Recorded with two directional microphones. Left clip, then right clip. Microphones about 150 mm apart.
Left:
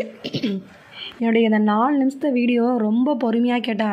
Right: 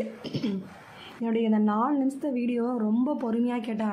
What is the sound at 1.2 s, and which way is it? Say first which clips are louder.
Speech: left 8 dB; 30° left (ahead or behind).